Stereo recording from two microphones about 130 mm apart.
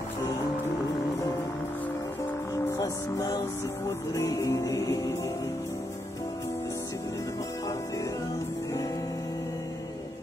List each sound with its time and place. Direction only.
2.8 s music: 25° left (ahead or behind)